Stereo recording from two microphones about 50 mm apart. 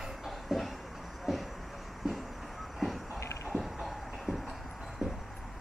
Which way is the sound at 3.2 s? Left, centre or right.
Left.